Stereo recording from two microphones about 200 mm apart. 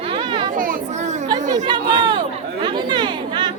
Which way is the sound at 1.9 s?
25° right (ahead or behind).